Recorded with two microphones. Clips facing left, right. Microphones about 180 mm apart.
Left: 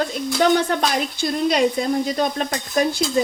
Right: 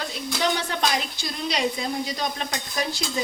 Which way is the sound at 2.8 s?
50° left (ahead or behind).